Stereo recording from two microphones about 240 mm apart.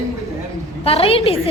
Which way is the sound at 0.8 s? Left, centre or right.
Left.